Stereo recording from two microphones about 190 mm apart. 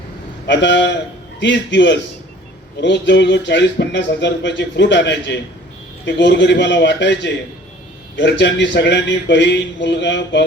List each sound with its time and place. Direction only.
0.4 s a man's voice: 65° left (ahead or behind)